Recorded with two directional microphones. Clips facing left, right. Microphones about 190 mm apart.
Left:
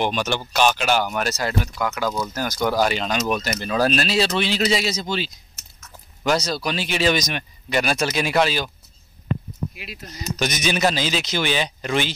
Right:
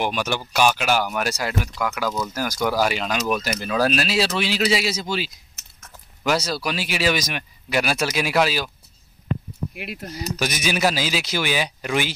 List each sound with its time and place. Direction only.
0.0 s speech: 10° right (ahead or behind)
9.8 s speech: 60° right (ahead or behind)
10.3 s speech: 10° right (ahead or behind)